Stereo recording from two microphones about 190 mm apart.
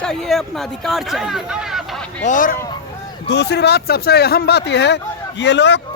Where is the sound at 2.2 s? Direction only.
45° left (ahead or behind).